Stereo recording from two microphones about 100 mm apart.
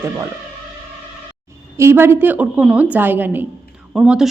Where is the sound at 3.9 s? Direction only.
5° right (ahead or behind).